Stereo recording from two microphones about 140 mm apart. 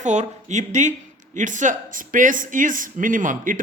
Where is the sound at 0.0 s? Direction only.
55° right (ahead or behind).